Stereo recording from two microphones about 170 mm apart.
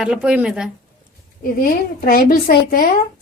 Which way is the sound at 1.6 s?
55° left (ahead or behind).